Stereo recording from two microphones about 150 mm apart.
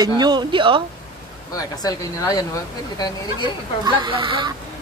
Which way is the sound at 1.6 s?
25° left (ahead or behind).